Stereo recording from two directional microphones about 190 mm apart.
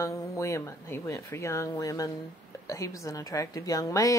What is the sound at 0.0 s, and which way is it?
Speech, 15° left (ahead or behind).